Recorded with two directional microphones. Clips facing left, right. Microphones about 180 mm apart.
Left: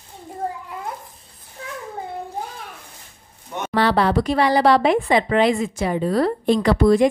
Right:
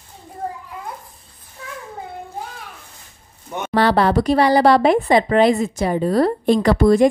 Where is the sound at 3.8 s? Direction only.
45° right (ahead or behind).